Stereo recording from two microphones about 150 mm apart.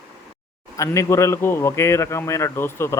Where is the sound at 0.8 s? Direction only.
20° left (ahead or behind).